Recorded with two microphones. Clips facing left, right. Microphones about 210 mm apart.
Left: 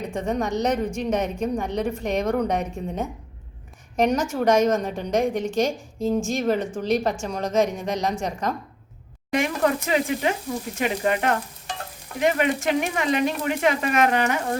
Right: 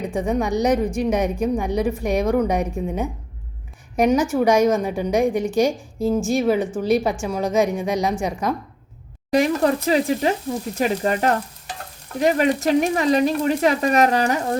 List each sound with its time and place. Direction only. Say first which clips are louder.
0.1 s a woman's voice: right 3 dB; 10° right (ahead or behind)
9.3 s speech: right 4 dB; 35° right (ahead or behind)